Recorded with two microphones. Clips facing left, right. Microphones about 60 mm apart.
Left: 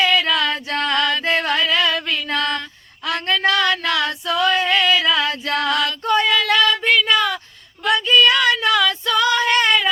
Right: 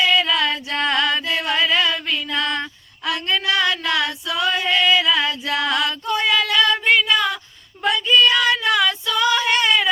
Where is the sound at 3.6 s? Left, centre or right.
Left.